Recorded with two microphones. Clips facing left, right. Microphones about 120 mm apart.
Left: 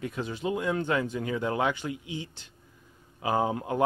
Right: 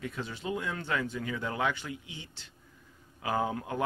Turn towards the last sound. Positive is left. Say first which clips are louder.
# left 4 dB
turn(degrees=20)  # may be behind; listen again after turning